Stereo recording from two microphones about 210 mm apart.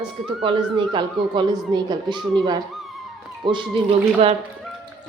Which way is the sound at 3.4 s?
20° right (ahead or behind).